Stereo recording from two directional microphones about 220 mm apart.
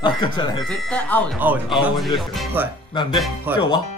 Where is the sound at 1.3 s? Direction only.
10° right (ahead or behind).